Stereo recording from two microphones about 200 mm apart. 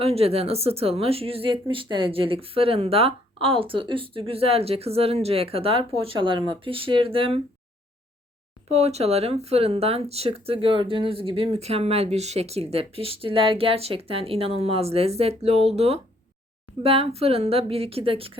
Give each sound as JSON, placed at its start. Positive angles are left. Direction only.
{"t": 0.0, "sound": "speech", "side_deg": -30}
{"t": 8.7, "sound": "speech", "side_deg": -30}